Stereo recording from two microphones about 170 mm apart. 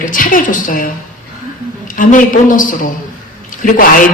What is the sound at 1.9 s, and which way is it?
Speech, 55° left (ahead or behind).